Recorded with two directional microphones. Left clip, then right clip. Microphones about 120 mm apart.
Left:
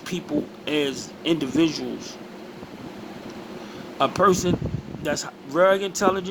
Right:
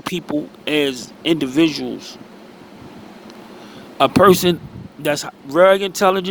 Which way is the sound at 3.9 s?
75° right (ahead or behind).